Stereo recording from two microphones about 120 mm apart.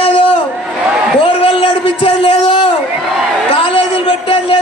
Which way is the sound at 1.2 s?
50° left (ahead or behind).